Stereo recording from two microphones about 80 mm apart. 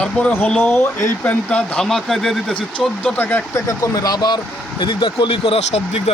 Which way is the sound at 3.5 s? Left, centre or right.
Left.